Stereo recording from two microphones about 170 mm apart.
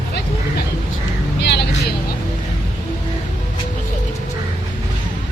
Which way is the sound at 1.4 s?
85° left.